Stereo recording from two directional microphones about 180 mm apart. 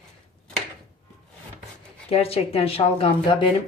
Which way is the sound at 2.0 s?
35° left (ahead or behind).